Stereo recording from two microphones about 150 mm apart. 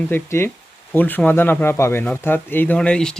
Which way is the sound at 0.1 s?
15° left (ahead or behind).